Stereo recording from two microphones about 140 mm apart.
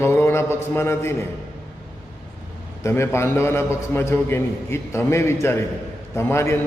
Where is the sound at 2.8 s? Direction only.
20° left (ahead or behind).